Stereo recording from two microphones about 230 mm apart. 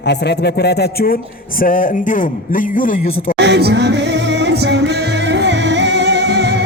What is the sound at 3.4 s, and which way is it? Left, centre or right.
Music, right.